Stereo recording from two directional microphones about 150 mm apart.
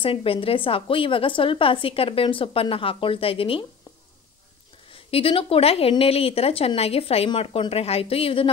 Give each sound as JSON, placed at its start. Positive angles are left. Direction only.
{"t": 0.0, "sound": "a woman's voice", "side_deg": 35}
{"t": 4.9, "sound": "a woman's voice", "side_deg": 40}